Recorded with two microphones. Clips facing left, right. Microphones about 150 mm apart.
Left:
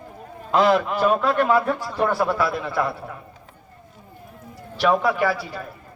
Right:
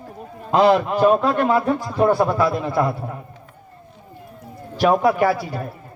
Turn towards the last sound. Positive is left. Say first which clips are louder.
# right 4 dB
turn(degrees=-45)  # may be behind; listen again after turning